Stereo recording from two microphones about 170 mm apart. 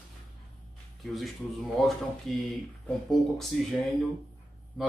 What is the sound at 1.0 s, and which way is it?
Speech, centre (ahead or behind).